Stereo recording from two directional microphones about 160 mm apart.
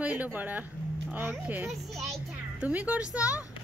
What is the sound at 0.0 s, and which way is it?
A woman's voice, 10° right (ahead or behind).